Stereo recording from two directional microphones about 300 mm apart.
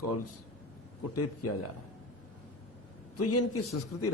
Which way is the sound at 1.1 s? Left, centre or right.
Left.